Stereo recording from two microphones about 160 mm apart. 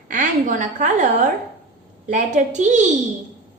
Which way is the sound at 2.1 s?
50° right (ahead or behind).